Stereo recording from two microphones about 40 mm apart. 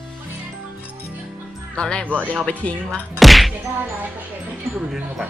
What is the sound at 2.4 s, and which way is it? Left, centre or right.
Speech, left.